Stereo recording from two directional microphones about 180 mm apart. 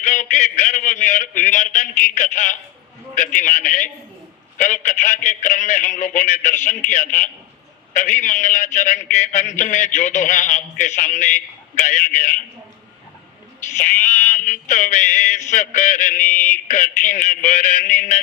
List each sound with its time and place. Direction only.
0.0 s a man's voice: 45° left (ahead or behind)
13.8 s a man's voice: 45° left (ahead or behind)